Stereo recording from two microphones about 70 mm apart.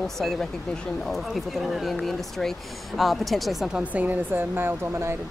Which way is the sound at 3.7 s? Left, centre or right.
Right.